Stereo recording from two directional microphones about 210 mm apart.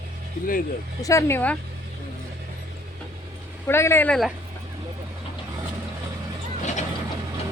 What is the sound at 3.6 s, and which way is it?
Speech, 10° left (ahead or behind).